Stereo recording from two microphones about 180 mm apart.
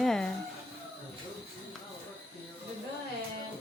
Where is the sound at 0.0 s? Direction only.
5° left (ahead or behind).